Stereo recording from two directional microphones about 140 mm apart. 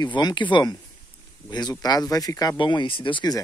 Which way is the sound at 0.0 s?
30° left (ahead or behind).